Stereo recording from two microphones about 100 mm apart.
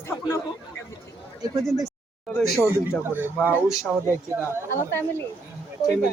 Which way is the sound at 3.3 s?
20° left (ahead or behind).